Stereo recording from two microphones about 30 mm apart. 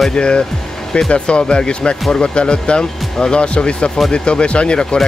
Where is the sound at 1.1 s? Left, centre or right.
Left.